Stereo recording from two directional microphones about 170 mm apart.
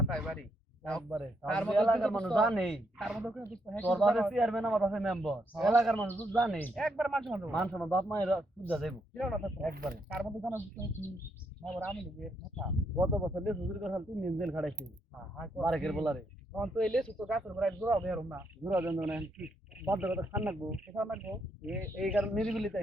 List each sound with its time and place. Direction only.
0.1 s a man's voice: centre (ahead or behind)
7.7 s a man's voice: 5° left (ahead or behind)
9.7 s speech: 60° right (ahead or behind)
10.2 s a man's voice: centre (ahead or behind)
10.8 s a man's voice: 10° right (ahead or behind)